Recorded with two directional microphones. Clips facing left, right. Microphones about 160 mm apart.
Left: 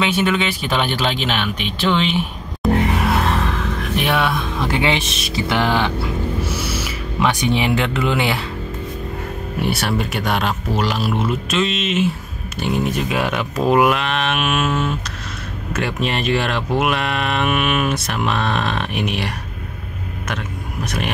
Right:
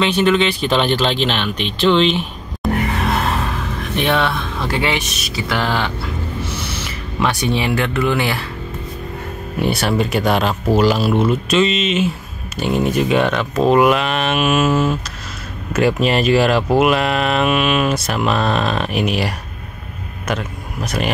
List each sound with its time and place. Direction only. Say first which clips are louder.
0.0 s speech: right 4 dB; 5° left (ahead or behind)
2.9 s music: left 1 dB; 5° left (ahead or behind)
3.9 s speech: right 2 dB; 5° left (ahead or behind)
9.6 s speech: right 3 dB; centre (ahead or behind)
20.8 s speech: right 3 dB; centre (ahead or behind)